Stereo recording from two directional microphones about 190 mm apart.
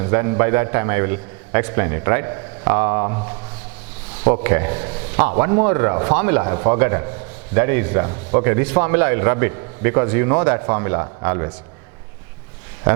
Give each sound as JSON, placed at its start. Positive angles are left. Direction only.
{"t": 0.0, "sound": "a man's voice", "side_deg": -15}